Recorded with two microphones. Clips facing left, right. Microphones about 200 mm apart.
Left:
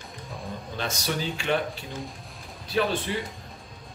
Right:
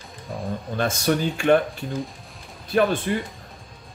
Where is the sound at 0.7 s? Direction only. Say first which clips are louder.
Right 8 dB; 50° right (ahead or behind).